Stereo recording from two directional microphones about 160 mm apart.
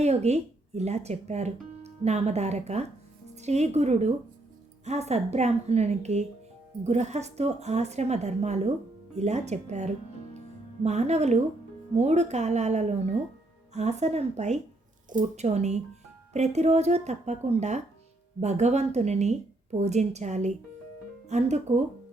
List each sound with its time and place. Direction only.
0.0 s a woman's voice: 40° right (ahead or behind)